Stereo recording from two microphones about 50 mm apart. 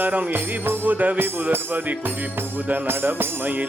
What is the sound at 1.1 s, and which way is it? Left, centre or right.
Music, right.